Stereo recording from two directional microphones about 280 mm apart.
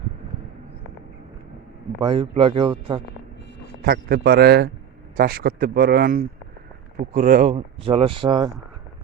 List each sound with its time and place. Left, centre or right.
2.0 s speech: centre
3.8 s speech: right; by 8.4 s centre